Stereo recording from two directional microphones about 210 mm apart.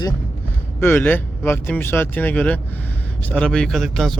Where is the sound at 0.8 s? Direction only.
10° left (ahead or behind).